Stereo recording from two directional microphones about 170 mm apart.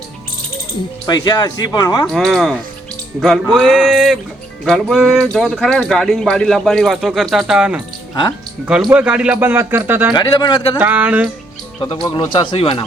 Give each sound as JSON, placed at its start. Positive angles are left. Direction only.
{"t": 1.0, "sound": "speech", "side_deg": 25}
{"t": 2.1, "sound": "speech", "side_deg": 0}
{"t": 8.9, "sound": "a man's voice", "side_deg": -10}
{"t": 10.2, "sound": "speech", "side_deg": 25}
{"t": 10.8, "sound": "a man's voice", "side_deg": -10}
{"t": 11.8, "sound": "speech", "side_deg": 25}